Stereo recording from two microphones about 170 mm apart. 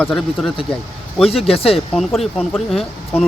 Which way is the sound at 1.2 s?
35° left (ahead or behind).